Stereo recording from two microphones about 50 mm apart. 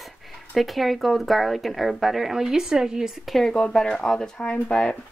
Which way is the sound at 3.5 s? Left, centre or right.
Centre.